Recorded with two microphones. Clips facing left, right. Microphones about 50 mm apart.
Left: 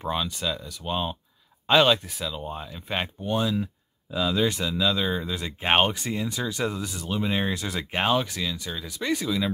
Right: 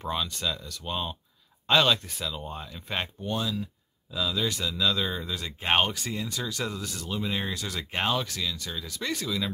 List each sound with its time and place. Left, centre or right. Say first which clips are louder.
0.0 s speech: left 2 dB; centre
2.9 s speech: left 4 dB; centre
4.8 s speech: left 2 dB; centre
7.2 s speech: left 5 dB; left; by 9.4 s centre